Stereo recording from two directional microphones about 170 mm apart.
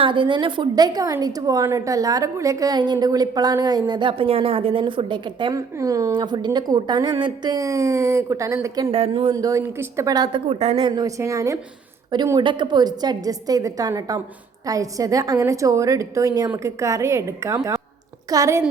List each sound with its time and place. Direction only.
0.0 s a woman's voice: 30° right (ahead or behind)
9.0 s speech: 35° right (ahead or behind)
9.3 s a woman's voice: 20° right (ahead or behind)
10.5 s a woman's voice: 35° right (ahead or behind); by 18.6 s 20° right (ahead or behind)